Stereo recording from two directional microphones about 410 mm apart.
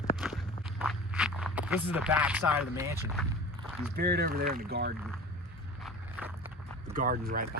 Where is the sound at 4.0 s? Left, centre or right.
Right.